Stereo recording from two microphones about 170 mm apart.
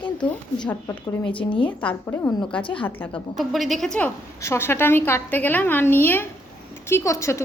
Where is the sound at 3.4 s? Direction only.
Centre (ahead or behind).